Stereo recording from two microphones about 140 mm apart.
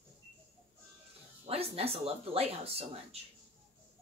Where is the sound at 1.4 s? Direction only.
45° right (ahead or behind).